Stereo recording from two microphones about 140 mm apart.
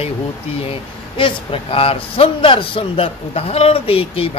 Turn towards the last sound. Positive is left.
turn(degrees=40)  # may be behind; listen again after turning